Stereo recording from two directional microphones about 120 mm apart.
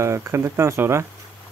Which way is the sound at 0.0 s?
25° right (ahead or behind).